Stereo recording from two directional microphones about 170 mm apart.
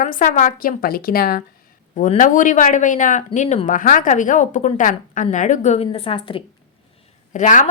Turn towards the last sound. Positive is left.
turn(degrees=45)  # may be behind; listen again after turning